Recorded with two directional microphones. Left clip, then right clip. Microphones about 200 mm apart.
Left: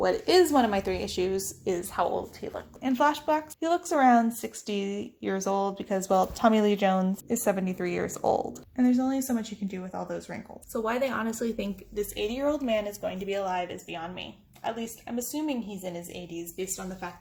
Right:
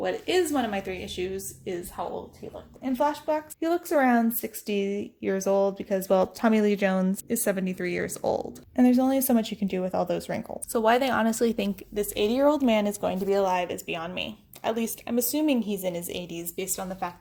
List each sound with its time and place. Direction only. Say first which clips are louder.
0.1 s speech: left 3 dB; 10° right (ahead or behind)
0.5 s a woman's voice: left 4 dB; 15° left (ahead or behind)
2.8 s speech: left 1 dB; 10° right (ahead or behind)
3.6 s speech: even; 30° right (ahead or behind)
8.7 s speech: right 5 dB; 35° right (ahead or behind)
13.5 s speech: right 4 dB; 55° right (ahead or behind)